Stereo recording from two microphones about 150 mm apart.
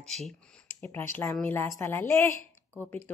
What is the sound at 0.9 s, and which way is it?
A woman's voice, 15° left (ahead or behind).